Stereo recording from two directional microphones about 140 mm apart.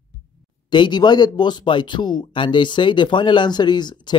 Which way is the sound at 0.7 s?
35° left (ahead or behind).